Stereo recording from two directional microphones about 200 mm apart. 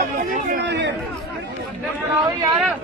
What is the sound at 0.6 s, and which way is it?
Chatter, 60° right (ahead or behind).